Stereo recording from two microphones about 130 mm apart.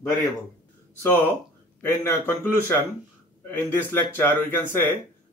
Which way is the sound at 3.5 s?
15° left (ahead or behind).